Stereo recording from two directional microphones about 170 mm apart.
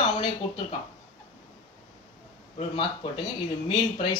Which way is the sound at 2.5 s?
30° left (ahead or behind).